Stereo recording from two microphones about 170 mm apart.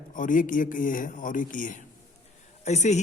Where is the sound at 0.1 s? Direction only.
50° left (ahead or behind).